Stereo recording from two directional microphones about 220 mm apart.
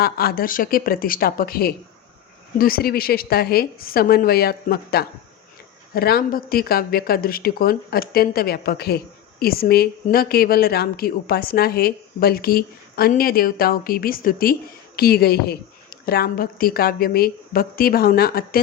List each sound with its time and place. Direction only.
0.0 s speech: 45° left (ahead or behind)